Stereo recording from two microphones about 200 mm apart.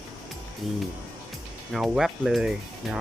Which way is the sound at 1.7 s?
Centre (ahead or behind).